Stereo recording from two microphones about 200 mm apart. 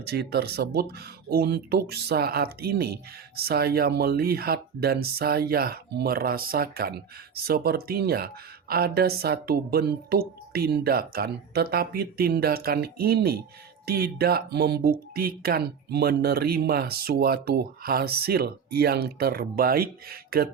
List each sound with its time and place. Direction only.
0.0 s speech: 55° right (ahead or behind)